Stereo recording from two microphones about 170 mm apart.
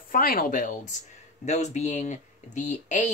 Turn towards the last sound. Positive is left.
turn(degrees=45)  # may be behind; listen again after turning